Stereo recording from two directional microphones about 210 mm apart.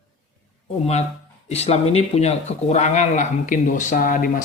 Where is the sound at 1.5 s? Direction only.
30° left (ahead or behind).